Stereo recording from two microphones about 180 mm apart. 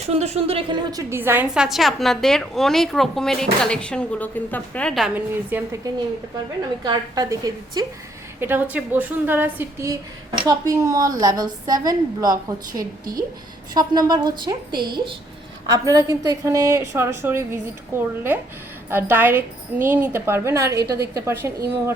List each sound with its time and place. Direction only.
0.0 s a woman's voice: 35° right (ahead or behind); by 5.9 s 10° right (ahead or behind)
6.8 s a woman's voice: 20° right (ahead or behind)